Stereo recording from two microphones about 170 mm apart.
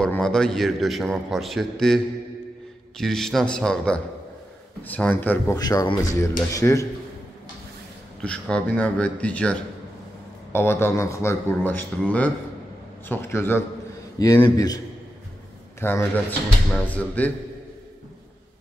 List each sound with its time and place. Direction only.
0.0 s a man's voice: 5° left (ahead or behind)
3.0 s a man's voice: centre (ahead or behind)
5.6 s a man's voice: 20° left (ahead or behind)
8.2 s a man's voice: 5° left (ahead or behind); by 14.8 s 25° left (ahead or behind)
15.8 s speech: 10° left (ahead or behind)